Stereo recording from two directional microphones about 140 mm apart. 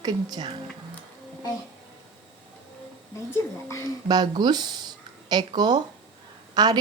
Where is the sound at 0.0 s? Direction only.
30° right (ahead or behind).